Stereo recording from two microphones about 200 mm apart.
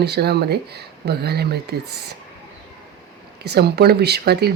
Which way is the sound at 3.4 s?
55° right (ahead or behind).